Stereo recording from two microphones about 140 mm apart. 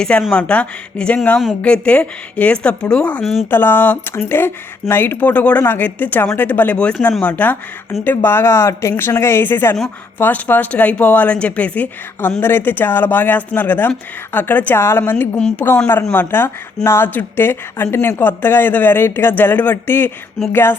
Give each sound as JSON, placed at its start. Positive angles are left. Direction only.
{"t": 0.0, "sound": "a woman's voice", "side_deg": 5}